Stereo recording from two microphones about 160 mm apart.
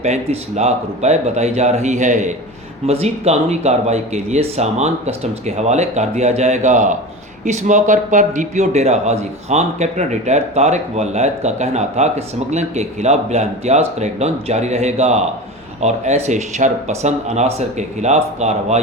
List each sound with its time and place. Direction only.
0.0 s speech: 45° right (ahead or behind)